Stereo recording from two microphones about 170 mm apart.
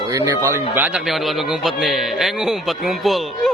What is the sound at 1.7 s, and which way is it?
Speech, centre (ahead or behind).